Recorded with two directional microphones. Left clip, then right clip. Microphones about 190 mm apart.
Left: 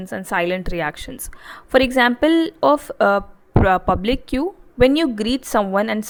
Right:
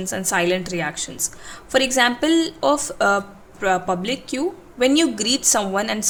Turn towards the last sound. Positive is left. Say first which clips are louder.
# left 2 dB
turn(degrees=40)  # may be behind; listen again after turning